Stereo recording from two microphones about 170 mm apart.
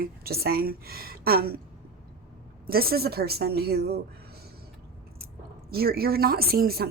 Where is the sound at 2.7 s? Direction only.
65° right (ahead or behind).